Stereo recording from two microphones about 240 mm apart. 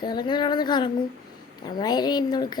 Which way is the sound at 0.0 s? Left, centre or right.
Centre.